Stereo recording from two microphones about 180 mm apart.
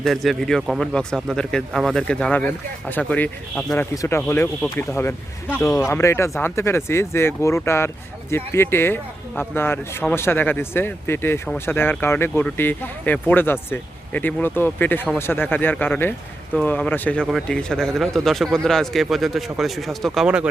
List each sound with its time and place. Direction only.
0.0 s a man's voice: centre (ahead or behind)
3.9 s a man's voice: 20° left (ahead or behind); by 20.5 s 5° right (ahead or behind)